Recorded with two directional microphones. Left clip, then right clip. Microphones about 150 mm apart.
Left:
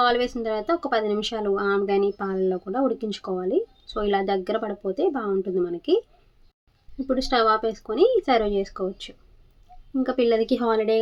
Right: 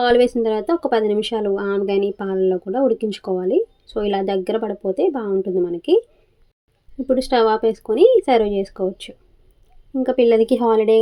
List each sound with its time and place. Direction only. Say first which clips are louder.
0.0 s speech: right 6 dB; 25° right (ahead or behind)
7.1 s speech: right 4 dB; 30° right (ahead or behind)